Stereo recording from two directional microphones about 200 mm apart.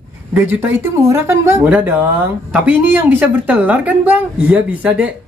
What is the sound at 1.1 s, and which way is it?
Speech, 15° right (ahead or behind).